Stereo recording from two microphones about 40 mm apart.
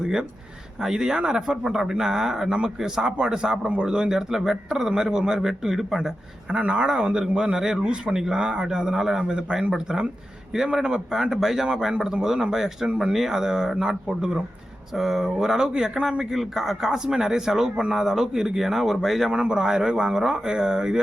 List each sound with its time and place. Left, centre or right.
0.0 s speech: centre
6.5 s speech: right
14.9 s speech: centre
19.3 s speech: centre